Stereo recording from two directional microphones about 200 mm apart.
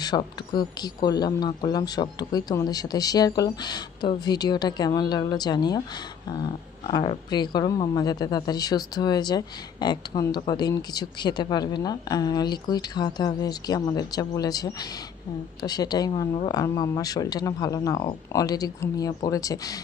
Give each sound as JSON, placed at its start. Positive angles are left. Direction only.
{"t": 0.0, "sound": "speech", "side_deg": 20}